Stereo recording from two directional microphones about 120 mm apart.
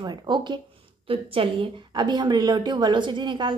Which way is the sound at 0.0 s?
40° right (ahead or behind).